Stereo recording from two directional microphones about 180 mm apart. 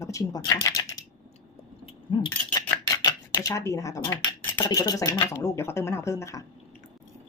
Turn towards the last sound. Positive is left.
turn(degrees=15)  # may be behind; listen again after turning